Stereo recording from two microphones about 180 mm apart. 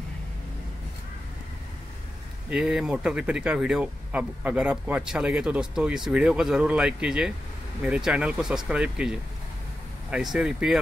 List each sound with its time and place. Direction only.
2.5 s speech: 5° right (ahead or behind)